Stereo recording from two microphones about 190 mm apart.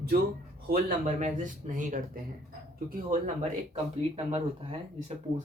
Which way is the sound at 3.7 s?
30° right (ahead or behind).